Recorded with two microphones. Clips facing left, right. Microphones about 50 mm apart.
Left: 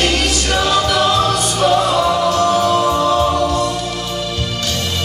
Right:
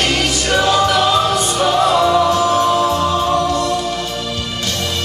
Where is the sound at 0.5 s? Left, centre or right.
Centre.